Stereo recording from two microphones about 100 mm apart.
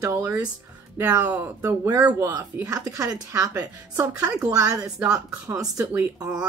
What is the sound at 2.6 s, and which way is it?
A woman's voice, 35° right (ahead or behind).